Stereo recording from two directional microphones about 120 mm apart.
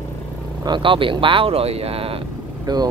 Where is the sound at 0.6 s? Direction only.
40° right (ahead or behind).